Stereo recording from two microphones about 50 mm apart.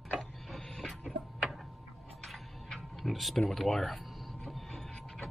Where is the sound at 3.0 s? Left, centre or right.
Centre.